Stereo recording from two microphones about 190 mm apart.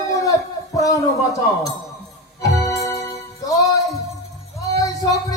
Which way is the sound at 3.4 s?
20° left (ahead or behind).